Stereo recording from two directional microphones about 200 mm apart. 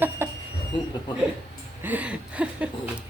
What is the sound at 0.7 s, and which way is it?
Speech, 25° left (ahead or behind).